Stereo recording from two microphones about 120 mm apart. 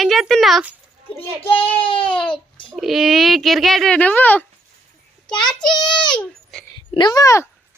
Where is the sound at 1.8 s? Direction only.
45° left (ahead or behind).